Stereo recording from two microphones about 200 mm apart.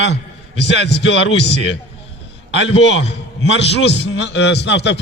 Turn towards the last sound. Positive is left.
turn(degrees=60)  # may be behind; listen again after turning